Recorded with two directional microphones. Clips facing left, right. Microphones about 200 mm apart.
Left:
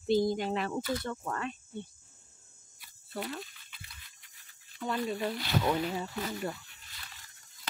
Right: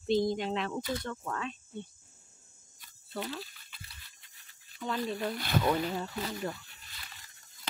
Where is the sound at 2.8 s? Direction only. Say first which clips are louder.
Even; 10° left (ahead or behind).